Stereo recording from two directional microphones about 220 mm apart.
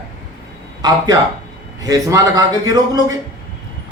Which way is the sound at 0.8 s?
20° right (ahead or behind).